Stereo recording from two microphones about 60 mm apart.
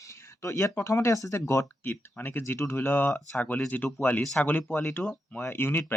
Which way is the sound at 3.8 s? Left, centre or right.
Centre.